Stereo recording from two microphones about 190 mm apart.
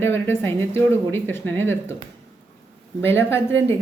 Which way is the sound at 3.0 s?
10° left (ahead or behind).